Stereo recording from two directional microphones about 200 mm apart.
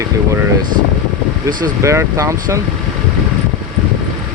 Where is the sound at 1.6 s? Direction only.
15° right (ahead or behind).